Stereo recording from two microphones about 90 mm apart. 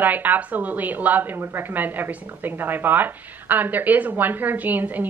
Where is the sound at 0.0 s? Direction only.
20° right (ahead or behind).